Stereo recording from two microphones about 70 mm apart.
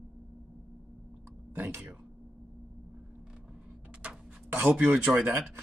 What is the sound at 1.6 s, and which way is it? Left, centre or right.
Speech, right.